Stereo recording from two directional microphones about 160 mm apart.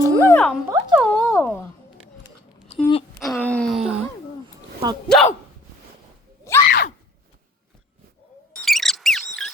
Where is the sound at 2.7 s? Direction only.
40° left (ahead or behind).